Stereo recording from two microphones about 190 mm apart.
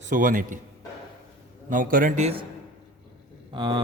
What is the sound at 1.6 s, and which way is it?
Speech, 45° right (ahead or behind).